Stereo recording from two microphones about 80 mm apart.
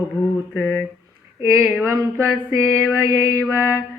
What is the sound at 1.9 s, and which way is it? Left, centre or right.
Mantra, right.